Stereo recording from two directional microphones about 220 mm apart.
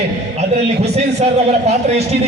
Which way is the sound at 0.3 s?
30° right (ahead or behind).